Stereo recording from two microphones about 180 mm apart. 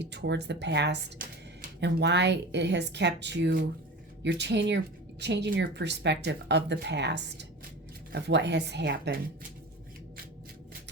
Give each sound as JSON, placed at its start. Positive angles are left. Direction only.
{"t": 0.0, "sound": "speech", "side_deg": -75}